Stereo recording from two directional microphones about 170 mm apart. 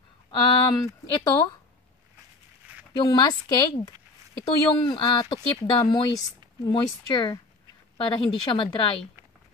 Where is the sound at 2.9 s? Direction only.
25° left (ahead or behind).